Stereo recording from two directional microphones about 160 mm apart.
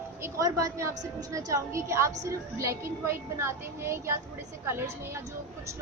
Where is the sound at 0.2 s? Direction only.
20° right (ahead or behind).